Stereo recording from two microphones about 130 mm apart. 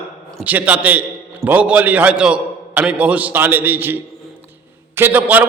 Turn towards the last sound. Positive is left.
turn(degrees=-10)  # may be behind; listen again after turning